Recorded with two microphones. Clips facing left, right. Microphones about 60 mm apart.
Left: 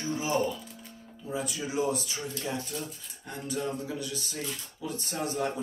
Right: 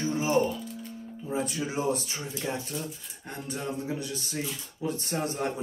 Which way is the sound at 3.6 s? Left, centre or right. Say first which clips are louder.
Even; right.